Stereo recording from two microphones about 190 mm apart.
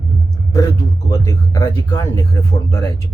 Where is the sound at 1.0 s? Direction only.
15° left (ahead or behind).